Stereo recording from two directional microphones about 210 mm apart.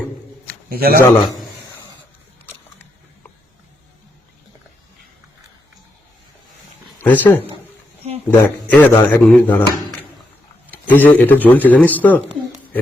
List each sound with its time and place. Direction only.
0.7 s a man's voice: 45° right (ahead or behind)
7.0 s speech: 10° left (ahead or behind)
10.7 s speech: 10° left (ahead or behind)